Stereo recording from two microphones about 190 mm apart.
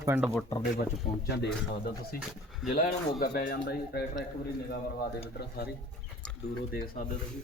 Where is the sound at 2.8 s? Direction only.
50° left (ahead or behind).